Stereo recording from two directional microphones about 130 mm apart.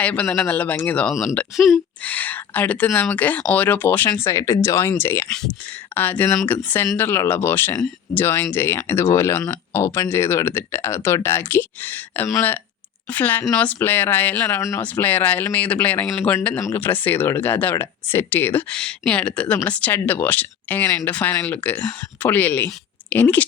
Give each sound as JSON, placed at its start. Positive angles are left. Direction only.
{"t": 0.0, "sound": "speech", "side_deg": 10}
{"t": 1.5, "sound": "speech", "side_deg": 0}
{"t": 2.0, "sound": "speech", "side_deg": 15}